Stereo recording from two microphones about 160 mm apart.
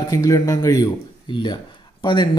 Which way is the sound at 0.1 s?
20° left (ahead or behind).